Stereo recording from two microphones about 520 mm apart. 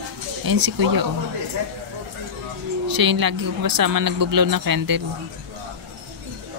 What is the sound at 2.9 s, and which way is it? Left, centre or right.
Speech, right.